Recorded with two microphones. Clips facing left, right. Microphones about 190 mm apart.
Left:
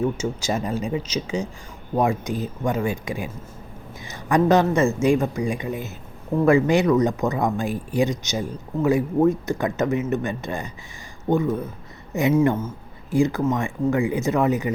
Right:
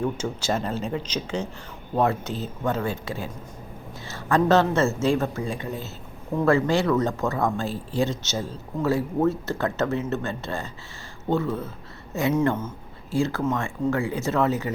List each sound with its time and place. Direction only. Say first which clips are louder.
0.0 s speech: left 3 dB; 10° left (ahead or behind)